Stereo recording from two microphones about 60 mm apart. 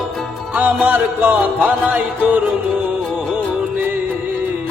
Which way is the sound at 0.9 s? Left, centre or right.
Right.